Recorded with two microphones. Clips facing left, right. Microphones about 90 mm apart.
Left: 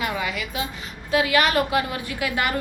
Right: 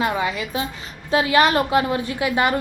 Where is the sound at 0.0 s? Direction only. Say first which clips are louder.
Right 5 dB; 30° right (ahead or behind).